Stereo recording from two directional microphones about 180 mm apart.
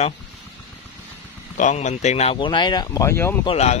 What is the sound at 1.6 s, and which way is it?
Speech, 40° left (ahead or behind).